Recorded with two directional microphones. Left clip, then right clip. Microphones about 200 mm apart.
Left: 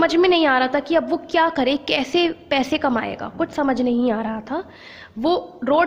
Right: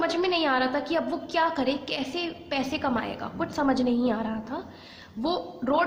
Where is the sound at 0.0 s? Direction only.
45° left (ahead or behind).